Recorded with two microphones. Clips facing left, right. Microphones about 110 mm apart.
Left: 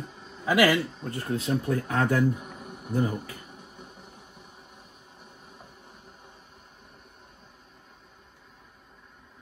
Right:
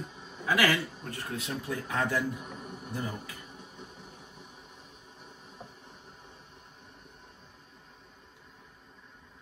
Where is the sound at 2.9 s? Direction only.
50° left (ahead or behind).